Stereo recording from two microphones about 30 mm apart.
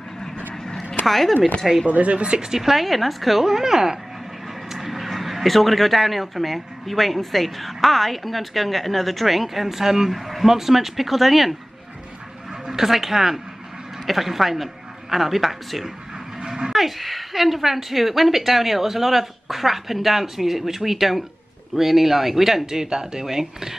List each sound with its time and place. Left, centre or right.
1.0 s speech: centre
1.9 s speech: right
2.4 s a woman's voice: centre
2.8 s speech: centre
3.4 s a woman's voice: centre
4.7 s speech: centre
10.1 s speech: centre
12.6 s a woman's voice: centre
16.4 s a sound: right
16.7 s a woman's voice: centre
22.7 s a woman's voice: centre